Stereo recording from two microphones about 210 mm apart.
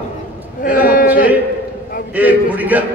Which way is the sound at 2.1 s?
10° right (ahead or behind).